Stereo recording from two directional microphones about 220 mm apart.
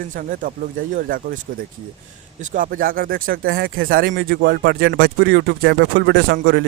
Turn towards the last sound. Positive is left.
turn(degrees=-45)  # may be behind; listen again after turning